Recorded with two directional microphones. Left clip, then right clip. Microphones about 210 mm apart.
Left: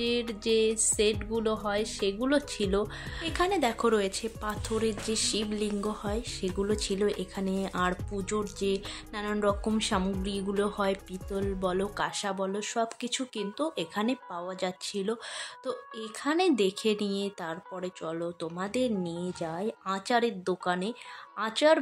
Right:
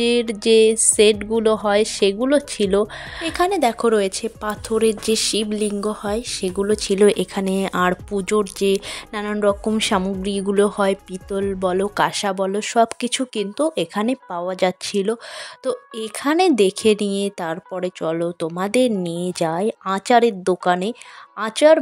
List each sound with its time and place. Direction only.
0.0 s a woman's voice: 40° right (ahead or behind)